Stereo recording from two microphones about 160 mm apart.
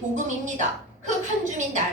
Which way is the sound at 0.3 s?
50° right (ahead or behind).